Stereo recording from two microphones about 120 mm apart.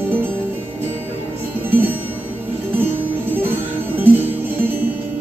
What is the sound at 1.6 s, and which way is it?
Music, 15° right (ahead or behind).